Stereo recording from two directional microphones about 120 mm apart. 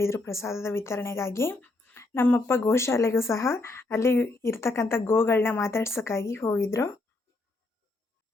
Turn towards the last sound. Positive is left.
turn(degrees=25)  # may be behind; listen again after turning